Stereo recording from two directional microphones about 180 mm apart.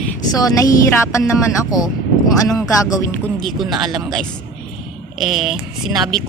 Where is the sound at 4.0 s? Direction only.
Centre (ahead or behind).